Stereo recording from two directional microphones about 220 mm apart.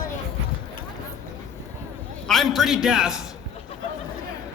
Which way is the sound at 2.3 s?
Centre (ahead or behind).